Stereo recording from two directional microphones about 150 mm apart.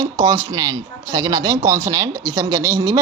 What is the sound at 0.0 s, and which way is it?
A man's voice, 25° right (ahead or behind).